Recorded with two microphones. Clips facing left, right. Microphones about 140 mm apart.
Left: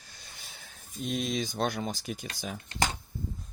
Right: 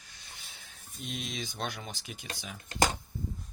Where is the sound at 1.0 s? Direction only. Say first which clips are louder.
Left 8 dB; 40° left (ahead or behind).